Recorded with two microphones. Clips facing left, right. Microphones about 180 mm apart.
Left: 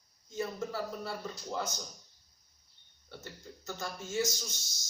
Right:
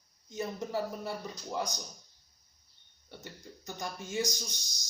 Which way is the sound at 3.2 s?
15° right (ahead or behind).